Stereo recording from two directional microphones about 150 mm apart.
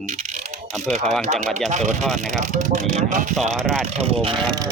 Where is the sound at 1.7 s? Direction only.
50° right (ahead or behind).